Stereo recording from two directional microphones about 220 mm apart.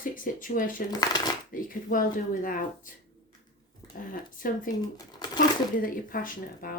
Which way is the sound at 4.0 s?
40° left (ahead or behind).